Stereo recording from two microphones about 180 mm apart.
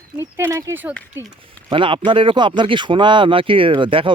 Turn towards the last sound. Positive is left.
turn(degrees=-30)  # may be behind; listen again after turning